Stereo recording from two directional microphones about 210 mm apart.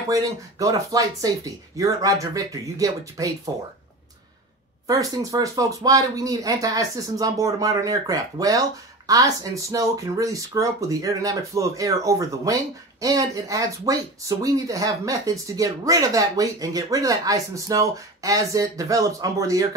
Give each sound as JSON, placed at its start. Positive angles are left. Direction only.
{"t": 0.1, "sound": "speech", "side_deg": -15}
{"t": 4.8, "sound": "speech", "side_deg": -15}